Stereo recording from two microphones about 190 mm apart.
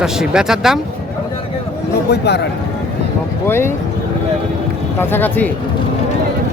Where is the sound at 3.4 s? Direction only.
10° left (ahead or behind).